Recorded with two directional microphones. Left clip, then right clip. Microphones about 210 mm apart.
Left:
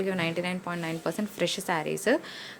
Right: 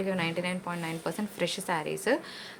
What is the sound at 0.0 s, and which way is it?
A woman's voice, 20° left (ahead or behind).